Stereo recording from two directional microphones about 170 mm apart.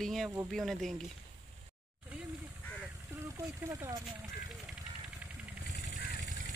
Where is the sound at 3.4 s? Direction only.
15° right (ahead or behind).